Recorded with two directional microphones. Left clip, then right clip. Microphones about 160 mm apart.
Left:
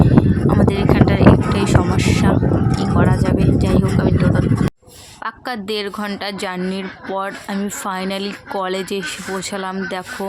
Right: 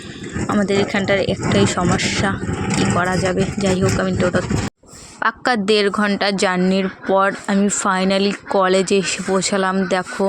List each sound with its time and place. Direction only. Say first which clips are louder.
0.6 s a sound: left 2 dB; 25° right (ahead or behind)
2.7 s speech: right 1 dB; 25° right (ahead or behind)
5.2 s a woman's voice: right 8 dB; 45° right (ahead or behind)